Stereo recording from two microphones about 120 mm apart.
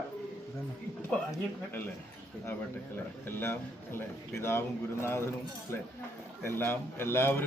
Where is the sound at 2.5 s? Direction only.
20° left (ahead or behind).